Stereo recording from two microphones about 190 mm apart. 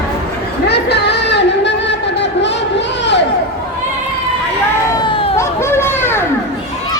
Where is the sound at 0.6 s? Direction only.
60° left (ahead or behind).